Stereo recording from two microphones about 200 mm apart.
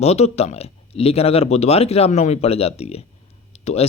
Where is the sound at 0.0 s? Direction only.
30° left (ahead or behind).